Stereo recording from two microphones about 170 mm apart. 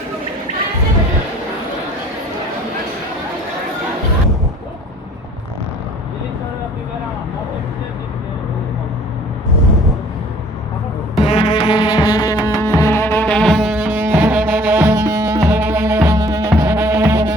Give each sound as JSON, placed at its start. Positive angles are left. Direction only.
{"t": 11.2, "sound": "music", "side_deg": 30}